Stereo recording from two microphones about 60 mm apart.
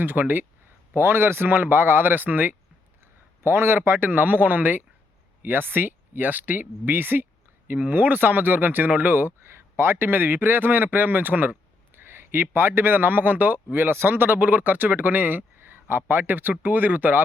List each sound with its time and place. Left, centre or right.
0.0 s a man's voice: right
3.4 s a man's voice: right